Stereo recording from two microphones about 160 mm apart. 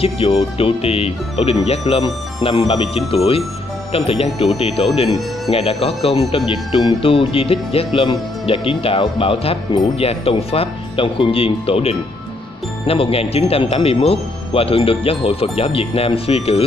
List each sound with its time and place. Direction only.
0.0 s speech: 35° left (ahead or behind)